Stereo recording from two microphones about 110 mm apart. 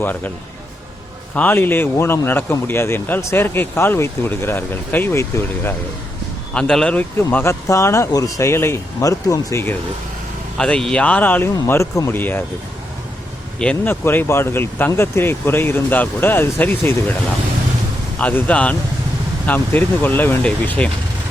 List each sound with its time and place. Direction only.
1.4 s speech: 20° left (ahead or behind)
6.5 s speech: 10° left (ahead or behind)
7.2 s speech: 20° left (ahead or behind)
10.6 s speech: 5° left (ahead or behind)
11.5 s speech: 30° left (ahead or behind)
13.8 s speech: 20° left (ahead or behind)
18.2 s speech: 15° left (ahead or behind)